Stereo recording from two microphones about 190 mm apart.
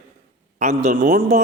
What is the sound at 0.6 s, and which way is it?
Speech, 35° right (ahead or behind).